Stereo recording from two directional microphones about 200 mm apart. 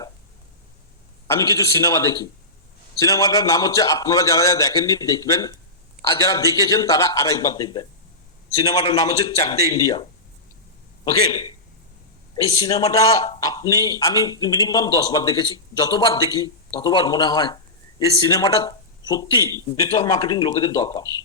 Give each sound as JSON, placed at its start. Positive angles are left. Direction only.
{"t": 1.3, "sound": "a man's voice", "side_deg": 15}
{"t": 12.6, "sound": "a man's voice", "side_deg": 15}